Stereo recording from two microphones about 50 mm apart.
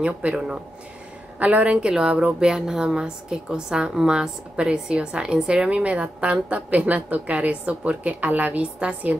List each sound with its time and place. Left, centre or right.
0.0 s a woman's voice: right